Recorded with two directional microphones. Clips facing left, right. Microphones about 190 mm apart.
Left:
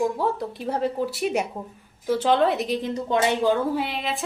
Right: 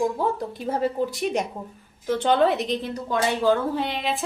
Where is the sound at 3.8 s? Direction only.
Centre (ahead or behind).